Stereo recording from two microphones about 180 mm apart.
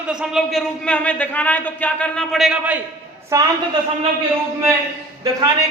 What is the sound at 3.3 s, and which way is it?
Speech, 20° right (ahead or behind).